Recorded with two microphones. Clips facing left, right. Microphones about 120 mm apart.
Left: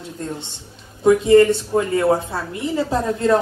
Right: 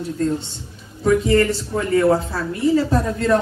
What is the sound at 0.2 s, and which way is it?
Speech, 20° left (ahead or behind).